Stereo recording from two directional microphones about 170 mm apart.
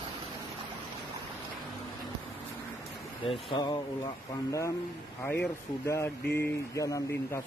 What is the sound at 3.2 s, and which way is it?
Speech, 30° left (ahead or behind).